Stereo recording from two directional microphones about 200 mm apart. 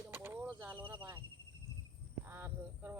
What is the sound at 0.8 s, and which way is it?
Speech, 25° right (ahead or behind).